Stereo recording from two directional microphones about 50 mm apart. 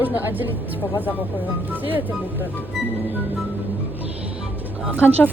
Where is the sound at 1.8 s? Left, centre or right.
Right.